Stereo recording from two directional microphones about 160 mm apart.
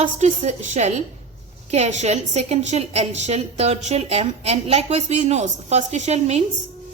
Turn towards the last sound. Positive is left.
turn(degrees=-40)  # may be behind; listen again after turning